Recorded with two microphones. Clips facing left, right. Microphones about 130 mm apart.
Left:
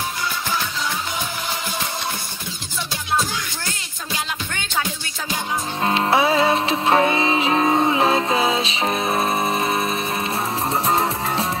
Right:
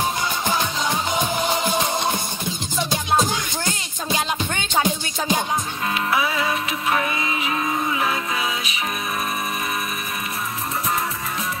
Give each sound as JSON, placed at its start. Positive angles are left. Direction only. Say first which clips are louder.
{"t": 1.1, "sound": "music", "louder": "right 6 dB", "side_deg": -20}
{"t": 2.9, "sound": "music", "louder": "right 2 dB", "side_deg": -20}
{"t": 5.9, "sound": "music", "louder": "left 6 dB", "side_deg": 30}
{"t": 10.9, "sound": "music", "louder": "left 4 dB", "side_deg": 30}